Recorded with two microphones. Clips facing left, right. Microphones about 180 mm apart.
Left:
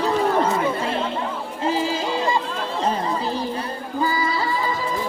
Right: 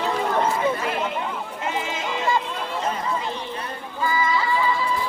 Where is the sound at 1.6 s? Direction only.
35° left (ahead or behind).